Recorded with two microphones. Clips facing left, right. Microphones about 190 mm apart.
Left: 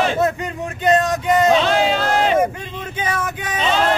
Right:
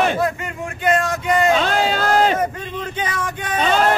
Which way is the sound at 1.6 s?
45° right (ahead or behind).